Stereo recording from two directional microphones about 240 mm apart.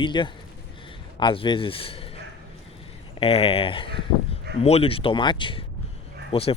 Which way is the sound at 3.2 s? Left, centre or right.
Left.